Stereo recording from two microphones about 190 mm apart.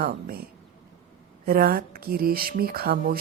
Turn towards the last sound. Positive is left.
turn(degrees=-50)  # may be behind; listen again after turning